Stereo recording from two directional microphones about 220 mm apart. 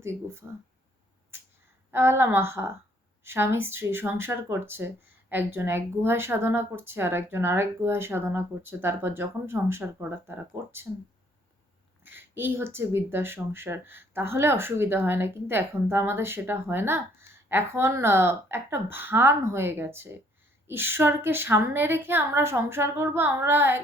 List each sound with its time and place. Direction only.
0.0 s speech: 10° right (ahead or behind)
1.9 s speech: 10° right (ahead or behind)
12.0 s speech: 10° right (ahead or behind)